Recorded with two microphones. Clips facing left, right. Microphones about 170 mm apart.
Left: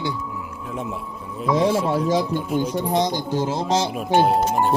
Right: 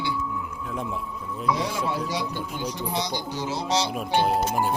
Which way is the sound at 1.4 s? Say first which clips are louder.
Left 7 dB; 50° left (ahead or behind).